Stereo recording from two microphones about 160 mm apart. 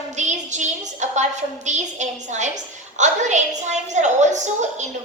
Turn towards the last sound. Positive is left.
turn(degrees=-45)  # may be behind; listen again after turning